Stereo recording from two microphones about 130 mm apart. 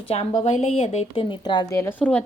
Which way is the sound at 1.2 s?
35° left (ahead or behind).